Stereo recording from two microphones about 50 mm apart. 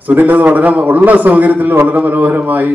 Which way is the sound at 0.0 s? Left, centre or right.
Right.